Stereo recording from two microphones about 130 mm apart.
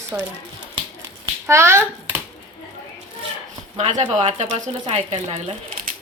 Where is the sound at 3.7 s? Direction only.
60° right (ahead or behind).